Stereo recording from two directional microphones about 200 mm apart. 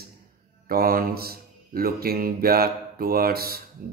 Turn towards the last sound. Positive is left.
turn(degrees=-50)  # may be behind; listen again after turning